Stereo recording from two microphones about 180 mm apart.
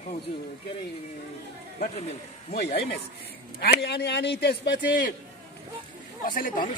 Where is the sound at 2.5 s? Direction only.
65° left (ahead or behind).